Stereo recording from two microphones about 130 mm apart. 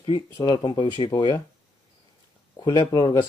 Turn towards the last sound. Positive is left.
turn(degrees=35)  # may be behind; listen again after turning